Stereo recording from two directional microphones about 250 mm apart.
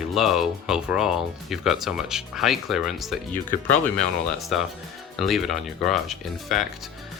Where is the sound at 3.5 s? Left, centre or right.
Left.